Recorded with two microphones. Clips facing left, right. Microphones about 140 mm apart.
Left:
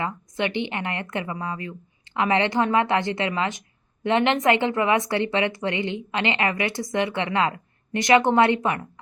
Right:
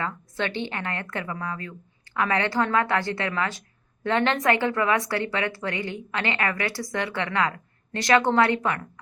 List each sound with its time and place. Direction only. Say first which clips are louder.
0.0 s speech: left 2 dB; 15° left (ahead or behind)